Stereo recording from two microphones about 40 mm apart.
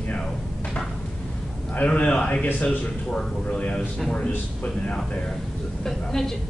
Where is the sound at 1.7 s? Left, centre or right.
Left.